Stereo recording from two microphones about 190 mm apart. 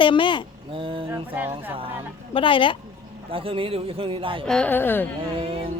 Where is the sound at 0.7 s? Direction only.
25° right (ahead or behind).